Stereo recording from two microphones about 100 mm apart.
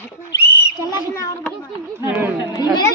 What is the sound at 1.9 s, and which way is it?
Speech, 20° right (ahead or behind).